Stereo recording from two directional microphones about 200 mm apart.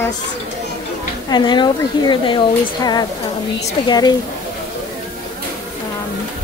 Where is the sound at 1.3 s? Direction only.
20° left (ahead or behind).